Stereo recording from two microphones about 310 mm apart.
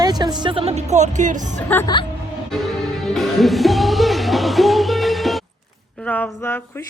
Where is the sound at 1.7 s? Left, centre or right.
Centre.